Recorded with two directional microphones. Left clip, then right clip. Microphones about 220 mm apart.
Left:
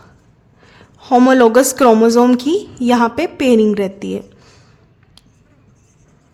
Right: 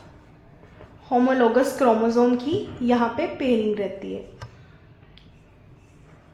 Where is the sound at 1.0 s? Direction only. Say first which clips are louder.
Left 10 dB; 40° left (ahead or behind).